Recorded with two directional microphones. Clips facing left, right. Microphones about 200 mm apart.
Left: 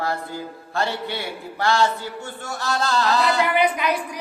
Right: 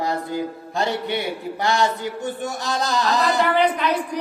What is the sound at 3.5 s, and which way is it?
Speech, 10° left (ahead or behind).